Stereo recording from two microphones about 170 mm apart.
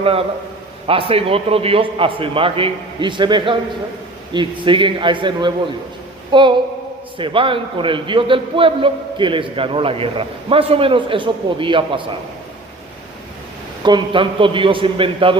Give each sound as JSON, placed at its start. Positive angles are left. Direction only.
{"t": 0.0, "sound": "a man's voice", "side_deg": -35}
{"t": 13.8, "sound": "a man's voice", "side_deg": -25}